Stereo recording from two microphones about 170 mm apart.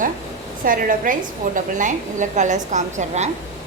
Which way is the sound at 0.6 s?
55° right (ahead or behind).